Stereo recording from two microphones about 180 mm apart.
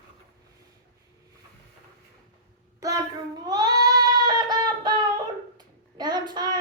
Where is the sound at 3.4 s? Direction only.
20° right (ahead or behind).